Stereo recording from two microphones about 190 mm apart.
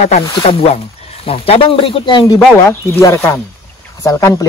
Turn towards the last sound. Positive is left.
turn(degrees=20)  # may be behind; listen again after turning